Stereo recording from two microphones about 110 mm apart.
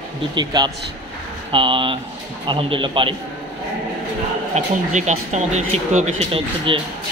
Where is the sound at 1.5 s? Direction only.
55° right (ahead or behind).